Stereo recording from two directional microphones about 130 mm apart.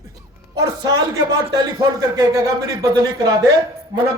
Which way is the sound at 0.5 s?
30° right (ahead or behind).